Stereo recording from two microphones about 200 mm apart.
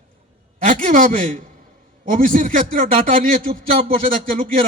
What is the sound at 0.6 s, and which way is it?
A man's voice, 40° right (ahead or behind).